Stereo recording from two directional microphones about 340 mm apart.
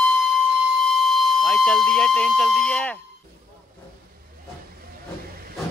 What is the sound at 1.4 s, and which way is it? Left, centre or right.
Speech, centre.